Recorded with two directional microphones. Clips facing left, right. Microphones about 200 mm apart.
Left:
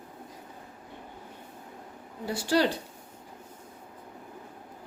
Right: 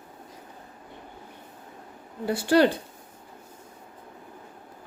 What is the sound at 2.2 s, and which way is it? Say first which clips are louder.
Speech: right 5 dB; 55° right (ahead or behind).